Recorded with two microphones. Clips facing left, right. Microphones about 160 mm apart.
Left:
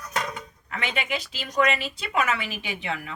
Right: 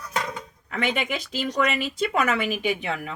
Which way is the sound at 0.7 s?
50° right (ahead or behind).